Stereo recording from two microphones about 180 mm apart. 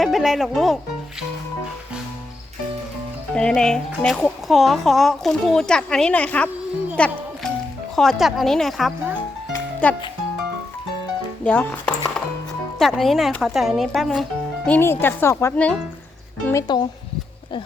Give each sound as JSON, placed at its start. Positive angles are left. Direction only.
{"t": 0.0, "sound": "speech", "side_deg": 0}
{"t": 3.3, "sound": "speech", "side_deg": 5}
{"t": 6.9, "sound": "music", "side_deg": 5}
{"t": 7.9, "sound": "speech", "side_deg": 0}
{"t": 11.4, "sound": "speech", "side_deg": 10}
{"t": 14.7, "sound": "speech", "side_deg": 10}
{"t": 16.5, "sound": "speech", "side_deg": 20}